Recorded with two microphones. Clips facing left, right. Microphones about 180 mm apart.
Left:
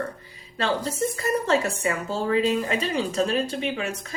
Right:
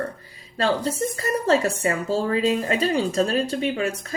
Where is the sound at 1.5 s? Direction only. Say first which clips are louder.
Right 6 dB; 35° right (ahead or behind).